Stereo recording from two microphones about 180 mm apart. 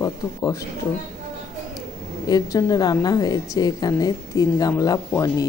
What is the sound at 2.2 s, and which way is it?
A woman's voice, 20° left (ahead or behind).